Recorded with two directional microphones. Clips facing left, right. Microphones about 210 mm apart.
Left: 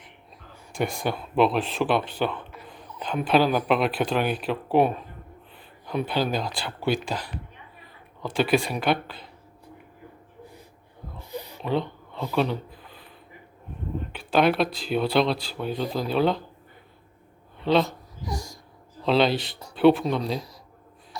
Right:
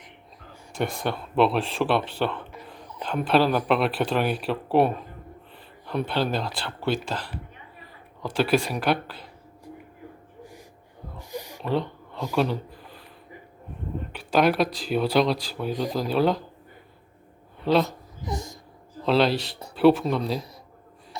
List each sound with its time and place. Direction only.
0.8 s speech: 5° left (ahead or behind)
8.5 s speech: 5° left (ahead or behind)
8.8 s speech: 5° right (ahead or behind)
11.2 s a sound: 15° right (ahead or behind)
11.6 s speech: centre (ahead or behind)
14.1 s speech: 5° right (ahead or behind)
17.6 s speech: centre (ahead or behind)
18.3 s a child's voice: 20° right (ahead or behind)
19.0 s speech: centre (ahead or behind)